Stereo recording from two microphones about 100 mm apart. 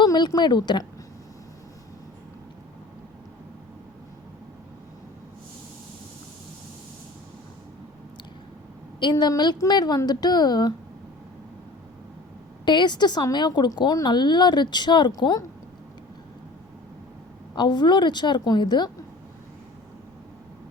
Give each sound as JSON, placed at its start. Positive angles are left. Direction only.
{"t": 0.0, "sound": "speech", "side_deg": 40}
{"t": 9.0, "sound": "speech", "side_deg": 50}
{"t": 12.6, "sound": "speech", "side_deg": 50}
{"t": 17.5, "sound": "speech", "side_deg": 45}